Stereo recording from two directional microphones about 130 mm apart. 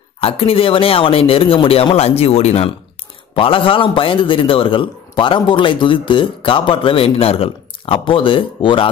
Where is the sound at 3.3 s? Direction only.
45° left (ahead or behind).